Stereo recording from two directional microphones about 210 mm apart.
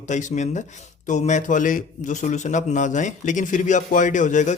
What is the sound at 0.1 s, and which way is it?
A man's voice, 35° left (ahead or behind).